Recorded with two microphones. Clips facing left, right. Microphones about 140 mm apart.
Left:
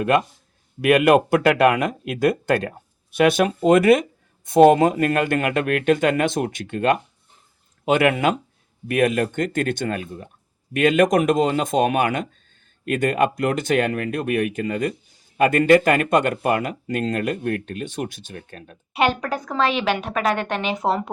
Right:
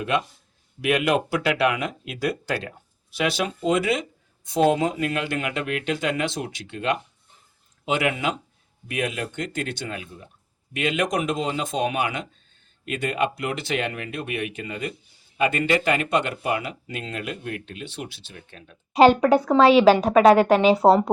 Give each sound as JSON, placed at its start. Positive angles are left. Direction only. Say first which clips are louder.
{"t": 0.0, "sound": "speech", "louder": "left 6 dB", "side_deg": 50}
{"t": 18.9, "sound": "a woman's voice", "louder": "right 7 dB", "side_deg": -30}